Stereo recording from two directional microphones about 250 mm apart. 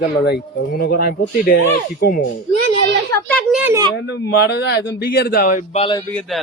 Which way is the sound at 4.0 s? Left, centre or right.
Left.